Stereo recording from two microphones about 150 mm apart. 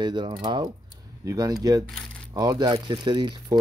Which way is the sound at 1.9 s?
5° left (ahead or behind).